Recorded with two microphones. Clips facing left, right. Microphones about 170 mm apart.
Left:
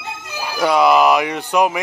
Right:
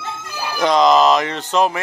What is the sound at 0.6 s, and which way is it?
Speech, 10° left (ahead or behind).